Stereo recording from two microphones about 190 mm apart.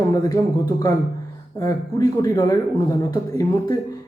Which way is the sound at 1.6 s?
20° left (ahead or behind).